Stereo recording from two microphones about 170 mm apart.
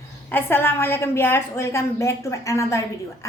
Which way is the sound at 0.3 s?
10° left (ahead or behind).